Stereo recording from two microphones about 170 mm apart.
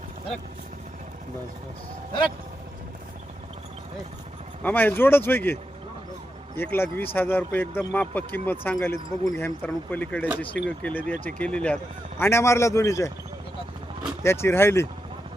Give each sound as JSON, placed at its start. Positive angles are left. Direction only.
{"t": 4.6, "sound": "speech", "side_deg": 10}
{"t": 6.6, "sound": "speech", "side_deg": 15}
{"t": 14.3, "sound": "speech", "side_deg": 15}